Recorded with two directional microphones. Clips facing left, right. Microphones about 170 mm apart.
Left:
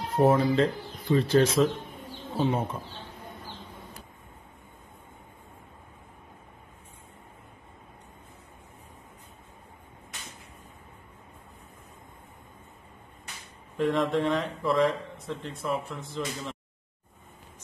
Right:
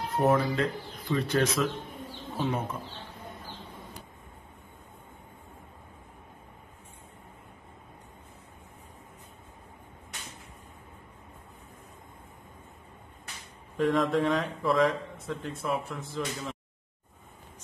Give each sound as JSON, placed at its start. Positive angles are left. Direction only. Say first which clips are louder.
{"t": 0.2, "sound": "speech", "louder": "left 4 dB", "side_deg": 30}
{"t": 13.7, "sound": "speech", "louder": "even", "side_deg": 0}